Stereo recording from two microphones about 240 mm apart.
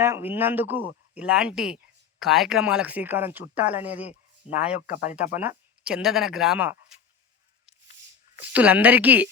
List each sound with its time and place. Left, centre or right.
0.0 s speech: centre
4.9 s speech: left
5.1 s speech: centre
8.4 s speech: centre